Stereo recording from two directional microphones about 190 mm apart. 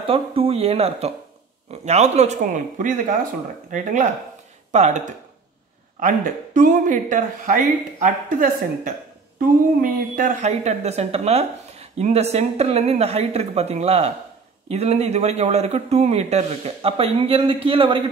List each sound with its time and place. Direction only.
0.0 s a woman's voice: 30° right (ahead or behind)